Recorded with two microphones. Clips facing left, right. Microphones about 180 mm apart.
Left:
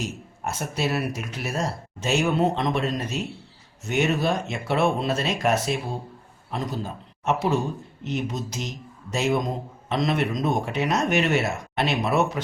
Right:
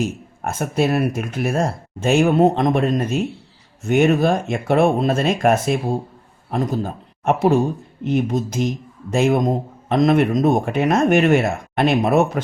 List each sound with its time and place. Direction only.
0.0 s speech: 50° right (ahead or behind)